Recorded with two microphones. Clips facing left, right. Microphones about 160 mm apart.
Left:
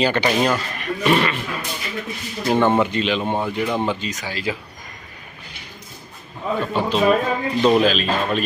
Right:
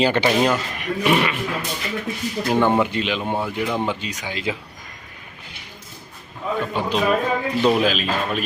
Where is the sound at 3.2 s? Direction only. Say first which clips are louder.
Left 2 dB; 20° left (ahead or behind).